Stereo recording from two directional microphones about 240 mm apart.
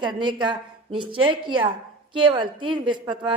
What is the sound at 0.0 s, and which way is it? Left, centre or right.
A woman's voice, centre.